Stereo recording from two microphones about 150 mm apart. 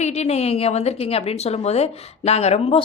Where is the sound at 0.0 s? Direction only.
50° left (ahead or behind).